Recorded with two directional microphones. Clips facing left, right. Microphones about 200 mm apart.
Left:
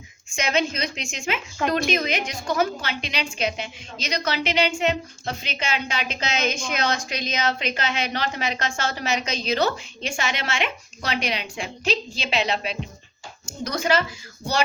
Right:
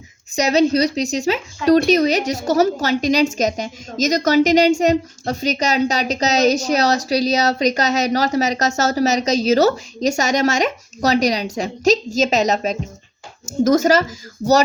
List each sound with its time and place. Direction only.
0.3 s a woman's voice: 40° right (ahead or behind)